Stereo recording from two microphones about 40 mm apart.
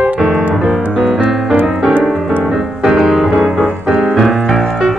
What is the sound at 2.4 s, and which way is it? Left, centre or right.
Piano, centre.